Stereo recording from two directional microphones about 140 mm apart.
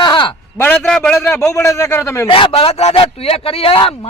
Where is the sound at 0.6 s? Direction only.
15° left (ahead or behind).